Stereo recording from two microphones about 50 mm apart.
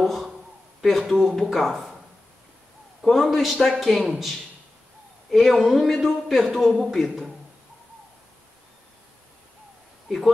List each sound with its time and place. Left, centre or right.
0.0 s a man's voice: centre
3.0 s a man's voice: centre
5.3 s a man's voice: centre
10.0 s speech: centre